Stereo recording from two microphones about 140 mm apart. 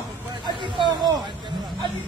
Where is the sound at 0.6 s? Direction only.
35° right (ahead or behind).